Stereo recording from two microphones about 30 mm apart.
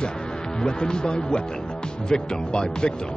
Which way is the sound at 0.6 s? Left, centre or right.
Left.